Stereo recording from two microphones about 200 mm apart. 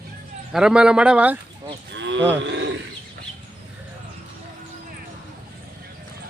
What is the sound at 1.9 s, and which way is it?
Cattle, 65° right (ahead or behind).